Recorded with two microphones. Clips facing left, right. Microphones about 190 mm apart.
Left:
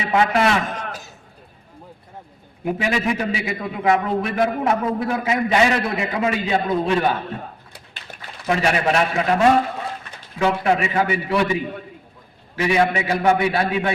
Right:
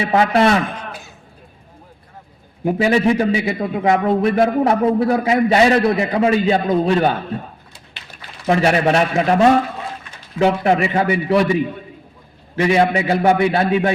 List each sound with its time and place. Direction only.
0.1 s a man's voice: 35° right (ahead or behind)
0.8 s a sound: 40° left (ahead or behind)
2.6 s a man's voice: 35° right (ahead or behind)
8.4 s a man's voice: 30° right (ahead or behind)
12.6 s a man's voice: 30° right (ahead or behind)